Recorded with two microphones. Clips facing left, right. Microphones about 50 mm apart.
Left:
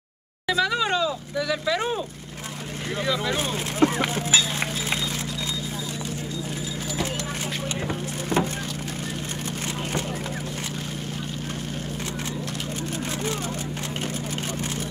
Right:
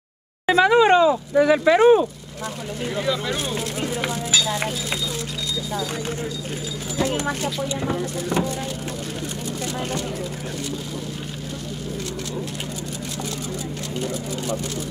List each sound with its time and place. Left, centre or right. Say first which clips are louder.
0.5 s speech: right 8 dB; right
3.0 s speech: right 1 dB; centre
3.5 s speech: left 4 dB; left
4.1 s music: right 1 dB; left